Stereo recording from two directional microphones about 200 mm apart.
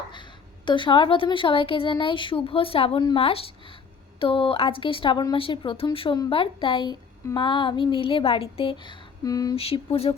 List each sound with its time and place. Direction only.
0.1 s speech: 25° left (ahead or behind)
9.6 s speech: 30° left (ahead or behind)